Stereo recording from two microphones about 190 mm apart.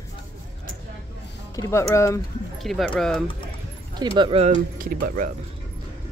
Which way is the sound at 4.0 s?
25° right (ahead or behind).